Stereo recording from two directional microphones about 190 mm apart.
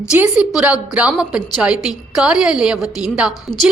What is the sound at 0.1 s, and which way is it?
A woman's voice, 5° right (ahead or behind).